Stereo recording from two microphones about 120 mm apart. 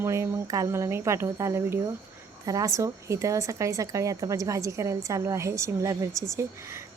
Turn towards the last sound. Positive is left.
turn(degrees=-25)  # may be behind; listen again after turning